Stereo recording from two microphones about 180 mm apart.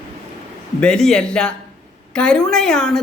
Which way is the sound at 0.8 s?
5° left (ahead or behind).